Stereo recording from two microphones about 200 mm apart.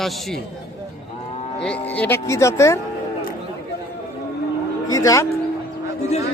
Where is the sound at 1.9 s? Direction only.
10° left (ahead or behind).